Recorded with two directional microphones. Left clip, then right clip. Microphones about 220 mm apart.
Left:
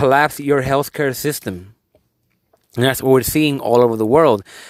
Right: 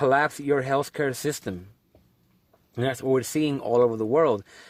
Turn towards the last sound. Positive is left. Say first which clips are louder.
# left 9 dB
turn(degrees=30)  # may be behind; listen again after turning